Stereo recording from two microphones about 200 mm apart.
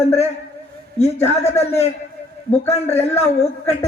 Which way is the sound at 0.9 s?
30° left (ahead or behind).